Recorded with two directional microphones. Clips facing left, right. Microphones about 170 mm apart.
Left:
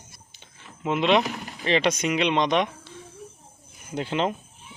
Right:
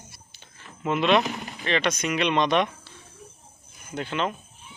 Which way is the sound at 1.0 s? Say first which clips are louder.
Even; 20° left (ahead or behind).